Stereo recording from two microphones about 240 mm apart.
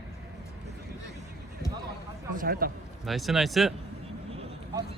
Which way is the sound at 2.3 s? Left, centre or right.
Right.